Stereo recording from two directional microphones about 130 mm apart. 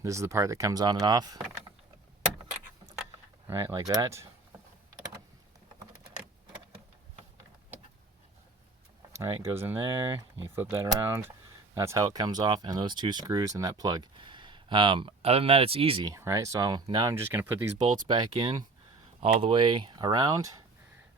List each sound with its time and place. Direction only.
0.0 s speech: 25° right (ahead or behind)
3.4 s speech: 25° right (ahead or behind)
9.1 s speech: 20° right (ahead or behind); by 16.0 s 45° right (ahead or behind)
16.0 s speech: 25° right (ahead or behind)
17.2 s speech: 15° right (ahead or behind)
18.1 s speech: 35° right (ahead or behind)